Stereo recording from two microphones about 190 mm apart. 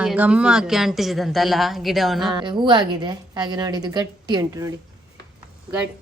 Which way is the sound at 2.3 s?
25° right (ahead or behind).